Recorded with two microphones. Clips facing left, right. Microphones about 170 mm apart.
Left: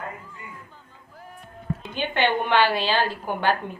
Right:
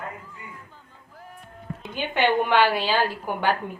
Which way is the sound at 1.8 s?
10° right (ahead or behind).